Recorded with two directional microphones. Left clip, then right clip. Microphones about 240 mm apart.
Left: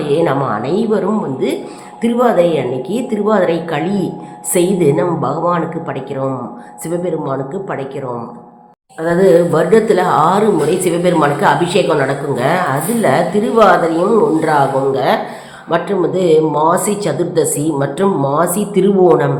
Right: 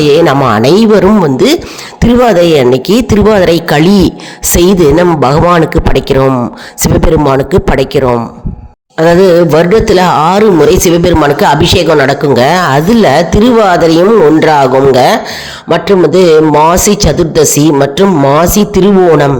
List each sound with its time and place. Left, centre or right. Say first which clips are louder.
0.0 s a woman's voice: right 9 dB; right